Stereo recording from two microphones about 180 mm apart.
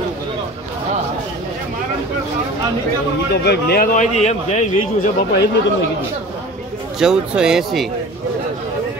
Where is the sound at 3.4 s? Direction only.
60° left (ahead or behind); by 4.6 s 40° left (ahead or behind).